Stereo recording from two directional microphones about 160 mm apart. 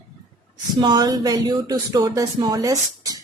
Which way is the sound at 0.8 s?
25° right (ahead or behind).